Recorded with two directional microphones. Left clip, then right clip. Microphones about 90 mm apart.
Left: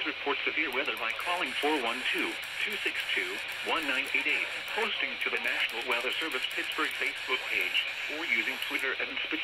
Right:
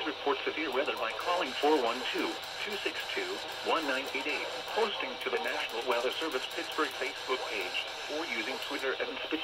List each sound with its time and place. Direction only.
0.3 s speech: 15° right (ahead or behind)
3.2 s speech: 15° right (ahead or behind)
5.3 s speech: 25° right (ahead or behind)